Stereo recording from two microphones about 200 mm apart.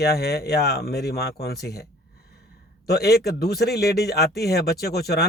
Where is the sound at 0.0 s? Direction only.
50° left (ahead or behind).